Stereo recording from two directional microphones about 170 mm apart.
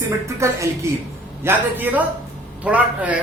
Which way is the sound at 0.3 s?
15° right (ahead or behind).